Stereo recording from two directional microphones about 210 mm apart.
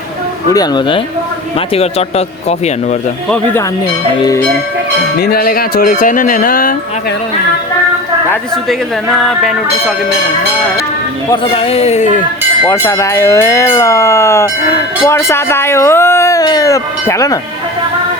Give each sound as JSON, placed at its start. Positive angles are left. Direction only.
{"t": 0.5, "sound": "speech", "side_deg": 20}
{"t": 5.2, "sound": "speech", "side_deg": 45}
{"t": 9.0, "sound": "a sound", "side_deg": 0}
{"t": 11.5, "sound": "speech", "side_deg": 30}
{"t": 12.6, "sound": "speech", "side_deg": 15}